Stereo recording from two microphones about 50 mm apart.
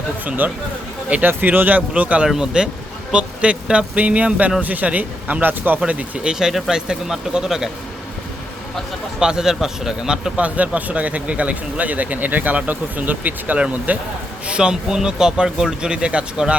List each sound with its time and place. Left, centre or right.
0.3 s speech: right
2.2 s speech: centre; by 5.8 s right
5.9 s speech: right
6.5 s speech: centre
9.2 s speech: centre
10.3 s speech: right
14.4 s speech: centre